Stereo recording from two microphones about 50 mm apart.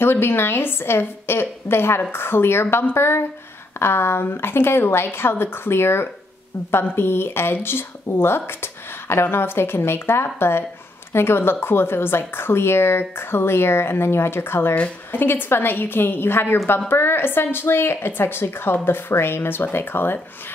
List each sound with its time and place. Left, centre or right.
0.0 s a woman's voice: left